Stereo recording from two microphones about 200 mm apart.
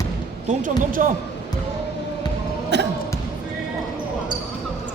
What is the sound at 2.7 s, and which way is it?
Music, 60° right (ahead or behind).